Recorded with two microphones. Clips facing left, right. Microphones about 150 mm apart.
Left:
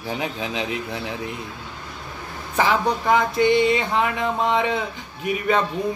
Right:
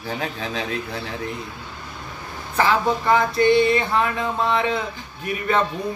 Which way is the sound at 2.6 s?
15° left (ahead or behind).